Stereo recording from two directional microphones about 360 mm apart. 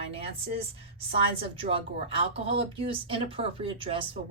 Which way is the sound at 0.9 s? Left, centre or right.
Centre.